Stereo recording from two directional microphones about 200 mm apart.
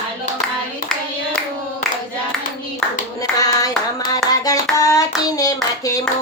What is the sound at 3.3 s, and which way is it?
Hands, 20° left (ahead or behind).